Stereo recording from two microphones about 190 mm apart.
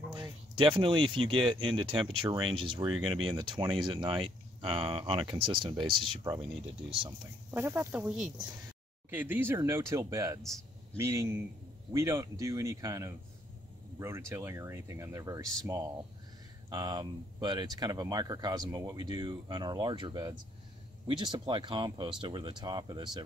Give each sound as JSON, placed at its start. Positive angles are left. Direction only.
{"t": 0.1, "sound": "a sound", "side_deg": -25}
{"t": 1.3, "sound": "speech", "side_deg": -25}
{"t": 7.5, "sound": "speech", "side_deg": -10}